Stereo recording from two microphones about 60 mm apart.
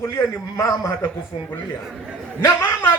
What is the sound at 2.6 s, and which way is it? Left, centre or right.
Speech, left.